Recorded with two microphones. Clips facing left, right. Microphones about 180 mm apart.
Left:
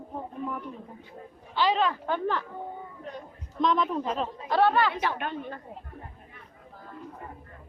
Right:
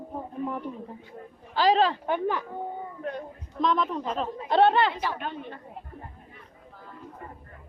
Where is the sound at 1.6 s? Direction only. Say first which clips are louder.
Right 3 dB; 35° right (ahead or behind).